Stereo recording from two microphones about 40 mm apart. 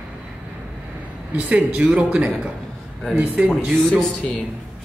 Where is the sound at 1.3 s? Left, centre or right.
Right.